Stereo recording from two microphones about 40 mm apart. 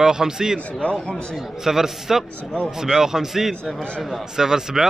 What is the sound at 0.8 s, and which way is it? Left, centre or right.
Speech, left.